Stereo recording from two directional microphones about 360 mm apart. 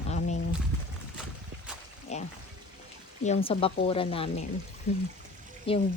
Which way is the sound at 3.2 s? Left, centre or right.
Centre.